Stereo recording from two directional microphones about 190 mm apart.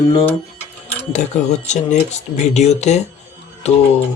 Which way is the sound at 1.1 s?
40° left (ahead or behind).